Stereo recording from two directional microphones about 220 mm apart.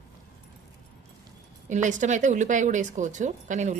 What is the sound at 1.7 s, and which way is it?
Speech, 35° right (ahead or behind).